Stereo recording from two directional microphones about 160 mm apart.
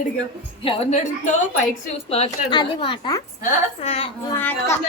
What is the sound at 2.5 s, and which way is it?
A woman's voice, 30° left (ahead or behind).